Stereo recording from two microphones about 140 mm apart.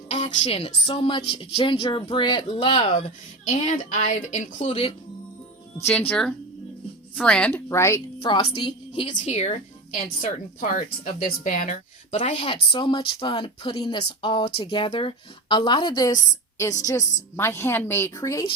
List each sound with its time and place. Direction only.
0.4 s speech: 45° left (ahead or behind)
3.4 s speech: 55° left (ahead or behind)
5.8 s a woman's voice: 15° left (ahead or behind)
7.7 s speech: 20° left (ahead or behind)
8.3 s speech: 40° left (ahead or behind)
9.2 s speech: 55° left (ahead or behind)
10.2 s a woman's voice: 75° left (ahead or behind); by 18.4 s 20° left (ahead or behind)